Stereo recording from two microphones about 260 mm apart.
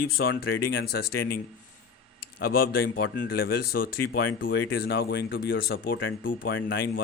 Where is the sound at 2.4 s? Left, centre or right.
Left.